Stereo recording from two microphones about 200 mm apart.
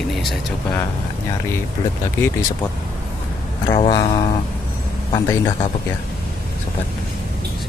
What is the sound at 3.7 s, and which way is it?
Speech, 20° left (ahead or behind).